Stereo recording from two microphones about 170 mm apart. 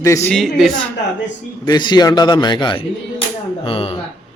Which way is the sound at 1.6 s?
25° left (ahead or behind).